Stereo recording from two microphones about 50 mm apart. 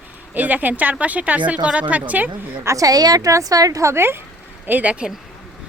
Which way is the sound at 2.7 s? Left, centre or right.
Right.